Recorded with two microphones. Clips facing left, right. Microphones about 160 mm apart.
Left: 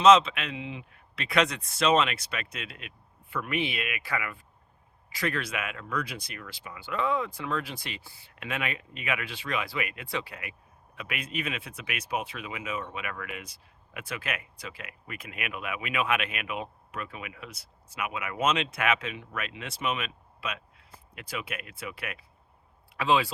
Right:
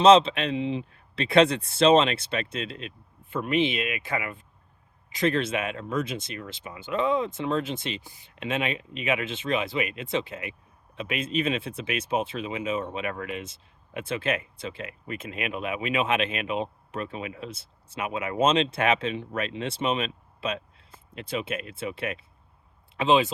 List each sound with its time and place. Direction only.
0.0 s speech: 30° right (ahead or behind)